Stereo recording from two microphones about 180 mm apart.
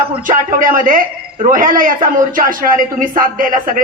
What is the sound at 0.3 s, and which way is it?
A man's voice, 50° right (ahead or behind).